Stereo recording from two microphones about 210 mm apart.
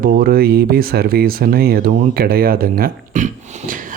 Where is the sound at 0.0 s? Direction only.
40° right (ahead or behind).